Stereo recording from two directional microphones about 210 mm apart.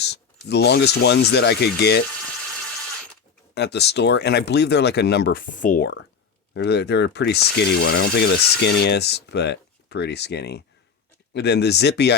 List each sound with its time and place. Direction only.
0.4 s speech: 50° left (ahead or behind)
3.5 s speech: 50° left (ahead or behind)